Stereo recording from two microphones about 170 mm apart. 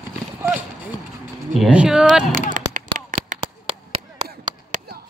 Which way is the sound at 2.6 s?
50° right (ahead or behind).